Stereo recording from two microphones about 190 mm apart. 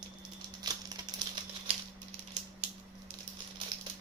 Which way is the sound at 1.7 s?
30° right (ahead or behind).